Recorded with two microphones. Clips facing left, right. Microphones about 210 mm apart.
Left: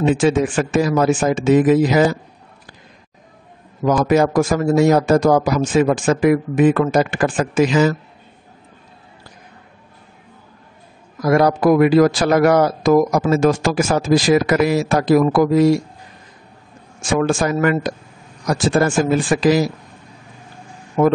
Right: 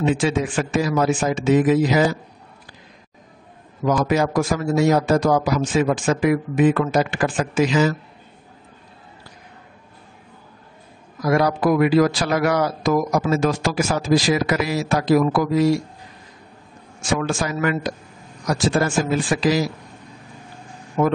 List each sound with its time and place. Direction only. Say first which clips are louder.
0.0 s speech: left 5 dB; 50° left (ahead or behind)
3.8 s speech: left 4 dB; 55° left (ahead or behind)
11.2 s speech: left 4 dB; 50° left (ahead or behind)
17.1 s speech: left 5 dB; 50° left (ahead or behind)
21.0 s speech: left 4 dB; 55° left (ahead or behind)